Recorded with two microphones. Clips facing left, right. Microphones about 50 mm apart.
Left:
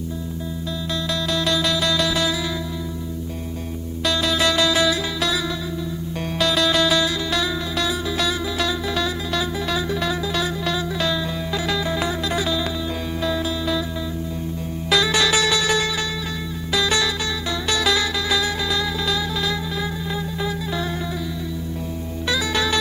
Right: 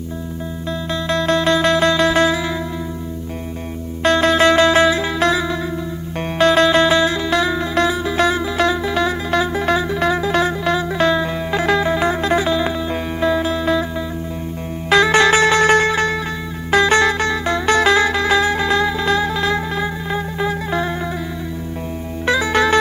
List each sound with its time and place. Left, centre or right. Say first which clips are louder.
1.0 s music: right 8 dB; right
4.0 s music: right 8 dB; right
14.8 s music: right 7 dB; right
22.3 s music: right 7 dB; right